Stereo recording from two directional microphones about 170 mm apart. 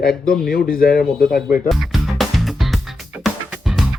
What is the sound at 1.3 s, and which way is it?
Speech, 55° left (ahead or behind).